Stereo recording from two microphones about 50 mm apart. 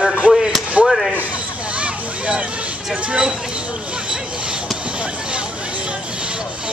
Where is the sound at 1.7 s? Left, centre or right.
Right.